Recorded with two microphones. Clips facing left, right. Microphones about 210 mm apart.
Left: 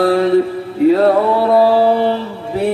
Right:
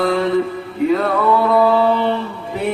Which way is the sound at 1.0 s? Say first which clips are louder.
Left 4 dB; 30° left (ahead or behind).